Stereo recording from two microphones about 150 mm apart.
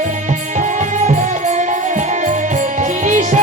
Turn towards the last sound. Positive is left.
turn(degrees=-55)  # may be behind; listen again after turning